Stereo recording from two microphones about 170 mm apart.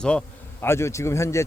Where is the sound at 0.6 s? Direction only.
15° left (ahead or behind).